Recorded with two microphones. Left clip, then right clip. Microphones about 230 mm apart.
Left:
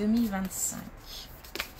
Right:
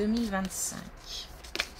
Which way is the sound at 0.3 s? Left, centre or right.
Right.